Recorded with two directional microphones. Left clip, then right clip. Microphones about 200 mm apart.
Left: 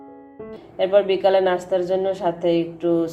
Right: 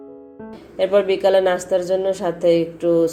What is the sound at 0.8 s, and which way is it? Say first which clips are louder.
A woman's voice: right 1 dB; 25° right (ahead or behind).